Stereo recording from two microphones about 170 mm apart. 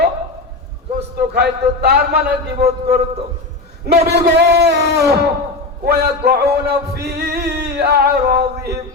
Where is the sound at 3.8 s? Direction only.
70° right (ahead or behind).